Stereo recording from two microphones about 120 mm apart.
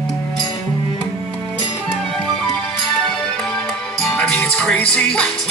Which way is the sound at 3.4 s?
5° left (ahead or behind).